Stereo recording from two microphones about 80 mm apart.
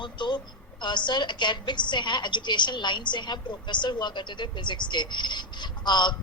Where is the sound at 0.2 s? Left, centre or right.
Left.